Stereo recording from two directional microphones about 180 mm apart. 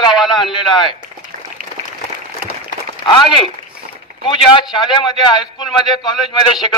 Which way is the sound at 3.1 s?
25° left (ahead or behind).